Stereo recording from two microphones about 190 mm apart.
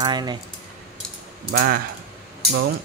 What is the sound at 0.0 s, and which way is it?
Speech, 20° right (ahead or behind).